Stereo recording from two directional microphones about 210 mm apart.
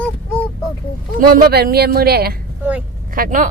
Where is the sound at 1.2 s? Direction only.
45° right (ahead or behind).